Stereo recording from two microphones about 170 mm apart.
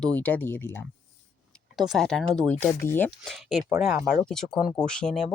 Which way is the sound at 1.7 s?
Centre (ahead or behind).